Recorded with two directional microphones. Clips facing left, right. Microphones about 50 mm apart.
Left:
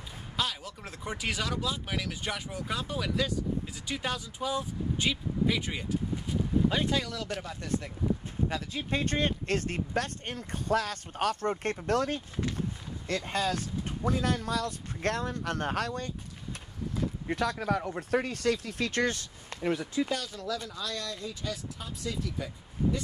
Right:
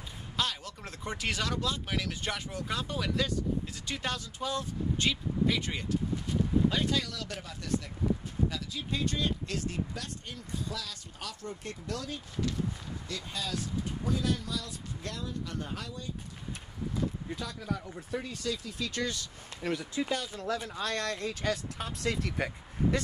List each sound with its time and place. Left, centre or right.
0.4 s speech: centre; by 16.1 s left
17.3 s speech: left
19.6 s speech: centre
20.0 s speech: centre
20.3 s speech: right